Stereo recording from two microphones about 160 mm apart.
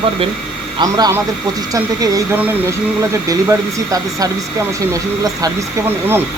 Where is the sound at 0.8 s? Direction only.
25° right (ahead or behind).